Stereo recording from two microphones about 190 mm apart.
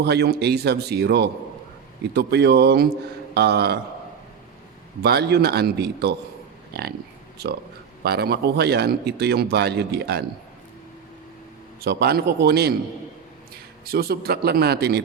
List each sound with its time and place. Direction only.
0.0 s speech: 60° right (ahead or behind)
5.0 s speech: 60° right (ahead or behind)
8.0 s speech: 55° right (ahead or behind)
11.8 s speech: 55° right (ahead or behind)
13.8 s speech: 50° right (ahead or behind)